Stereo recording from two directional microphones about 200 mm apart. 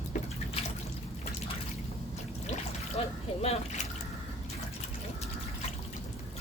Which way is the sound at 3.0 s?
30° left (ahead or behind).